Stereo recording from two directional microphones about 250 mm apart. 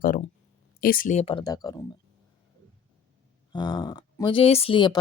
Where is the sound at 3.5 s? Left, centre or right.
Centre.